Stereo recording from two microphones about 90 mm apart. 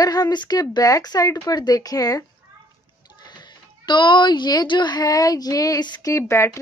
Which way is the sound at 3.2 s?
55° left (ahead or behind).